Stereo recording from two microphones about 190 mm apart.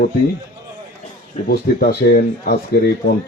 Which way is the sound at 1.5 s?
55° left (ahead or behind).